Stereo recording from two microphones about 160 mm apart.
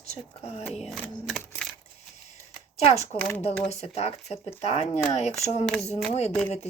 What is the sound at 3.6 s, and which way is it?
Speech, 40° left (ahead or behind).